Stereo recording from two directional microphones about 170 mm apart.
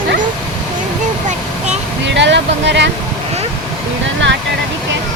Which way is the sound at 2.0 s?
90° right.